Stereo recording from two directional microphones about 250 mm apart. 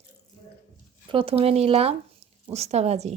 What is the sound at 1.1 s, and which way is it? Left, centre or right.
Speech, right.